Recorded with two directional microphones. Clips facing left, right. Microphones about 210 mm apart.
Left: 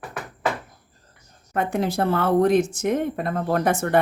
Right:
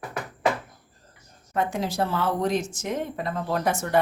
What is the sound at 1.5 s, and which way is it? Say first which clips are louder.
A woman's voice: left 3 dB; 60° left (ahead or behind).